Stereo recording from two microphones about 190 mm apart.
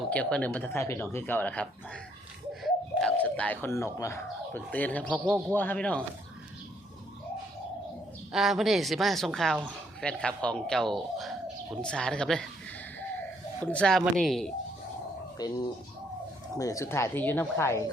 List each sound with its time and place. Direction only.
0.1 s speech: 5° left (ahead or behind)
8.3 s speech: centre (ahead or behind)
13.6 s speech: 5° left (ahead or behind)
15.4 s speech: 20° left (ahead or behind)
16.6 s speech: 15° left (ahead or behind)